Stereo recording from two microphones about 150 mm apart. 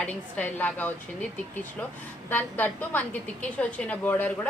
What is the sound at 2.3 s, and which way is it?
A woman's voice, 10° left (ahead or behind).